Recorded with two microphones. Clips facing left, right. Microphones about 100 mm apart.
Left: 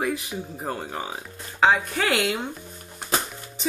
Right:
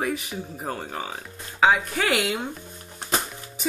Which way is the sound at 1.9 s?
Centre (ahead or behind).